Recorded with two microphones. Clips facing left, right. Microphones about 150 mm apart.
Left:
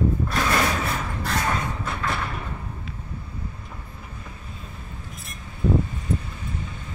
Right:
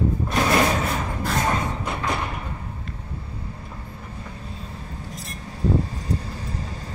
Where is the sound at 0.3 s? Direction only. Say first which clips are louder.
Right 8 dB; 20° right (ahead or behind).